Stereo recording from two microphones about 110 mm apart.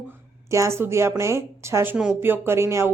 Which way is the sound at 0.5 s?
25° right (ahead or behind).